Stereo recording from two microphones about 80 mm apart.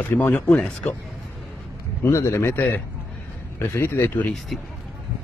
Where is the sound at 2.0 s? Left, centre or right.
Left.